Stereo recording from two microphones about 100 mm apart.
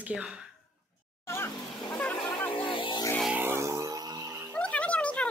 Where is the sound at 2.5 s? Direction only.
60° left (ahead or behind).